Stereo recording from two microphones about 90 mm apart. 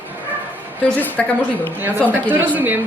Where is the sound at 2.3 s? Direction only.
20° right (ahead or behind).